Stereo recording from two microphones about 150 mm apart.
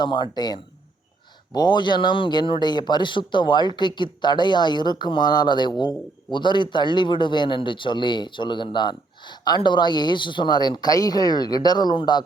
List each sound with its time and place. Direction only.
0.0 s a man's voice: 30° left (ahead or behind)